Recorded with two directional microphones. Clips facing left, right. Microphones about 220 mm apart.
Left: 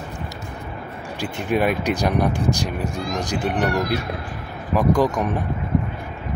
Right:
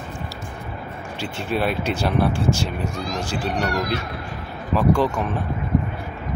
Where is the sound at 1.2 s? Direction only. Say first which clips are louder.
Left 3 dB; 15° left (ahead or behind).